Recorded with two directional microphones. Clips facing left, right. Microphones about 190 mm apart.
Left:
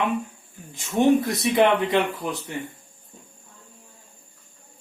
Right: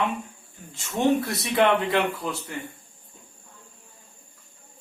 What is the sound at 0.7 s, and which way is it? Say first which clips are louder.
Speech: left 4 dB; 15° left (ahead or behind).